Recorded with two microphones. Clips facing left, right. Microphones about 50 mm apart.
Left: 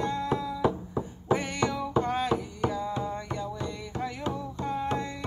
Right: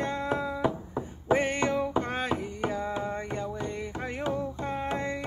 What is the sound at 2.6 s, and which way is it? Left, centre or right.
Carnatic music, right.